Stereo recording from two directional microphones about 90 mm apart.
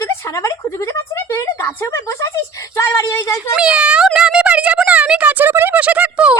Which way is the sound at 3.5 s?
10° right (ahead or behind).